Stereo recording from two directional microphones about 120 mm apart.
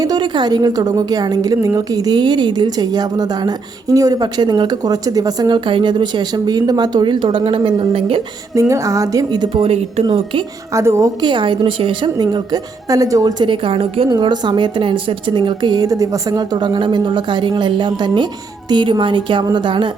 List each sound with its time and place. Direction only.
0.0 s a woman's voice: 35° right (ahead or behind); by 8.2 s 50° right (ahead or behind)
8.5 s a woman's voice: 25° right (ahead or behind); by 10.4 s 45° right (ahead or behind)
10.7 s a woman's voice: 25° right (ahead or behind)
11.2 s a woman's voice: 40° right (ahead or behind)
14.1 s a woman's voice: 40° right (ahead or behind)